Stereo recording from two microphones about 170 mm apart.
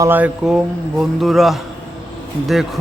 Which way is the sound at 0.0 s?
10° right (ahead or behind).